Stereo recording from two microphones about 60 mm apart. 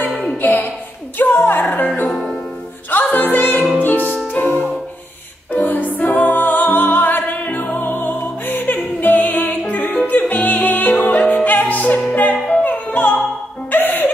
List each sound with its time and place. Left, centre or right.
0.4 s music: left
1.1 s speech: left
2.0 s music: centre
2.9 s music: left
12.9 s opera: left
13.7 s music: left